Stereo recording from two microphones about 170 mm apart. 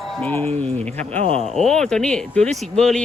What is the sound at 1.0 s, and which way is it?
Speech, 35° right (ahead or behind).